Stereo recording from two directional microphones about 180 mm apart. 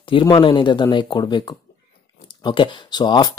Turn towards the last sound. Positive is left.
turn(degrees=25)  # may be behind; listen again after turning